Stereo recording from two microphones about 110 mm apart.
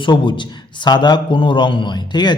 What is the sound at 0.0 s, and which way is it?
A man's voice, 45° left (ahead or behind).